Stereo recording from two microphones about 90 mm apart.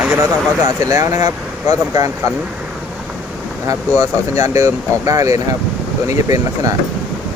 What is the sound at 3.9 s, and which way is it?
Speech, 35° right (ahead or behind).